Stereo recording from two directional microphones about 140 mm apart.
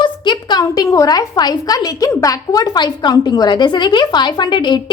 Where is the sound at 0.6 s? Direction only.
20° left (ahead or behind).